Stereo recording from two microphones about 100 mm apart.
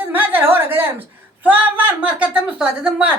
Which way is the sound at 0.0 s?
20° right (ahead or behind).